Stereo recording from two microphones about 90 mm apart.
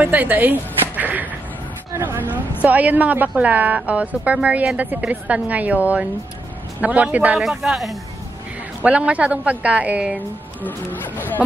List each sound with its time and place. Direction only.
0.0 s a woman's voice: 20° right (ahead or behind)
7.3 s speech: 5° right (ahead or behind)
8.8 s a woman's voice: 15° right (ahead or behind)
10.6 s speech: 20° left (ahead or behind)